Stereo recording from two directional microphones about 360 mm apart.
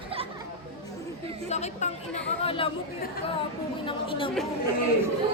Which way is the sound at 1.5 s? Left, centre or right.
Centre.